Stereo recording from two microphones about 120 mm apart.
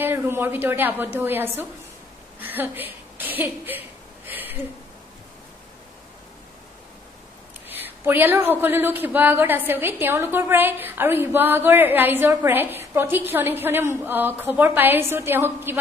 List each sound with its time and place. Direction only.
0.0 s speech: 20° right (ahead or behind)
4.3 s a sound: 15° right (ahead or behind)
7.6 s speech: 15° right (ahead or behind)